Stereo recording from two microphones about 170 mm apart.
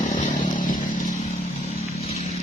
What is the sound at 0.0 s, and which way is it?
Chainsaw, 45° left (ahead or behind).